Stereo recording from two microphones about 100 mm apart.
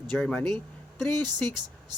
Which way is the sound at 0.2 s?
10° left (ahead or behind).